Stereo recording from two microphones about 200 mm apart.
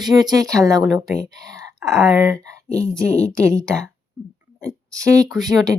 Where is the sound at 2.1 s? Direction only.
15° right (ahead or behind).